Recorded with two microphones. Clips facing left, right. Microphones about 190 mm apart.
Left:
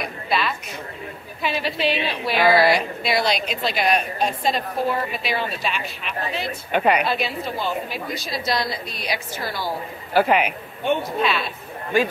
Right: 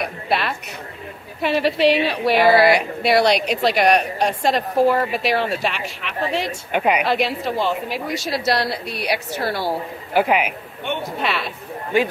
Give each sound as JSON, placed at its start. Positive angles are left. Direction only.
{"t": 0.0, "sound": "a woman's voice", "side_deg": -60}
{"t": 2.4, "sound": "speech", "side_deg": -10}
{"t": 3.0, "sound": "a woman's voice", "side_deg": -65}
{"t": 6.7, "sound": "speech", "side_deg": -10}
{"t": 7.1, "sound": "a woman's voice", "side_deg": -80}
{"t": 10.1, "sound": "speech", "side_deg": -10}
{"t": 11.1, "sound": "a woman's voice", "side_deg": -70}